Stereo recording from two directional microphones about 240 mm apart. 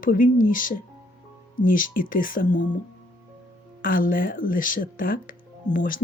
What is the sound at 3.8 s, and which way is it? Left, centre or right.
Speech, left.